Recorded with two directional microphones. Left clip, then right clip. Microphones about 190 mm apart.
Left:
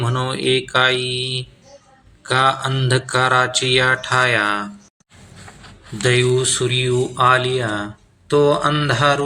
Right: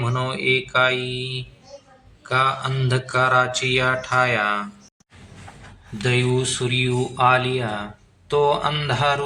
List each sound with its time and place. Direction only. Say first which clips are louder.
0.0 s a sound: left 2 dB; 15° left (ahead or behind)
2.2 s mantra: left 4 dB; 20° left (ahead or behind)
6.0 s speech: left 5 dB; 20° left (ahead or behind)